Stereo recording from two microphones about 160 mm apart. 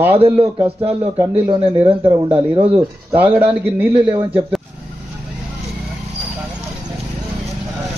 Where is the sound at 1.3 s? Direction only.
35° right (ahead or behind).